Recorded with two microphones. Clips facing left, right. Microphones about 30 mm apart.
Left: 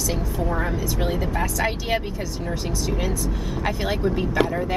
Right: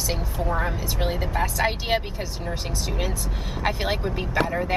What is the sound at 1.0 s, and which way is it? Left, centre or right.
A woman's voice, centre.